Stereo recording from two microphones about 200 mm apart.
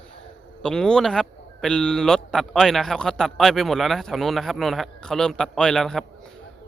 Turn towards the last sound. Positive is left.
turn(degrees=0)  # may be behind; listen again after turning